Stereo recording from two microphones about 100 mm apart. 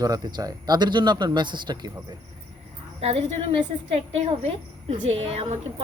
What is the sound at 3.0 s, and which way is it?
A woman's voice, 70° right (ahead or behind).